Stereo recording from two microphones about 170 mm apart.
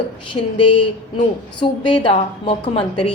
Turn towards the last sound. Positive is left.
turn(degrees=30)  # may be behind; listen again after turning